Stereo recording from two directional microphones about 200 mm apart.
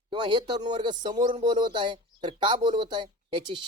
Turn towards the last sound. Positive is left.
turn(degrees=-25)  # may be behind; listen again after turning